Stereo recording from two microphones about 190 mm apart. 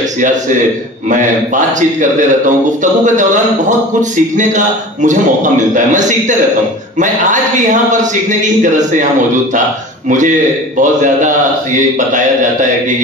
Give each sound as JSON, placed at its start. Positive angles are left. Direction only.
{"t": 1.0, "sound": "a man's voice", "side_deg": -40}
{"t": 10.0, "sound": "a man's voice", "side_deg": -40}